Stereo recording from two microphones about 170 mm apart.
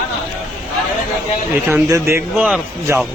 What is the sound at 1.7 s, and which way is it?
Speech, 15° right (ahead or behind).